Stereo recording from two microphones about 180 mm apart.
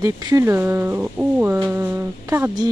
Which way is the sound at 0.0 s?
20° right (ahead or behind).